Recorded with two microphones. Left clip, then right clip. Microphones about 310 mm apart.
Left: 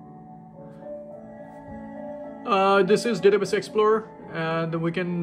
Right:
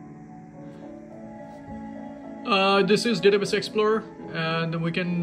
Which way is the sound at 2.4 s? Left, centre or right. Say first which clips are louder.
Left 1 dB; centre.